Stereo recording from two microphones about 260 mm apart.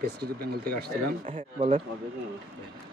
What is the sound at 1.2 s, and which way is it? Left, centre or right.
Speech, right.